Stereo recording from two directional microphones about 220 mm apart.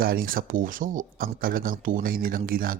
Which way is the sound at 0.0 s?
40° right (ahead or behind).